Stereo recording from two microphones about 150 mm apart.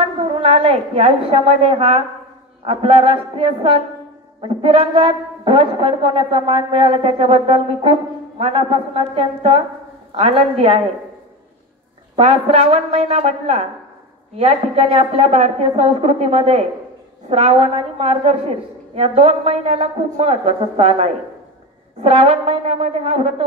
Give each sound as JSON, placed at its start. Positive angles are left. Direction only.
{"t": 0.2, "sound": "a woman's voice", "side_deg": -40}
{"t": 12.2, "sound": "a woman's voice", "side_deg": -45}